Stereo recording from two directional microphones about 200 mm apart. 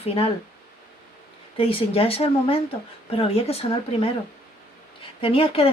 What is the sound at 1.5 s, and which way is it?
Speech, 30° left (ahead or behind).